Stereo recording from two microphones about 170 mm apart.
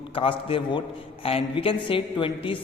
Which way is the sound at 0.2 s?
30° left (ahead or behind).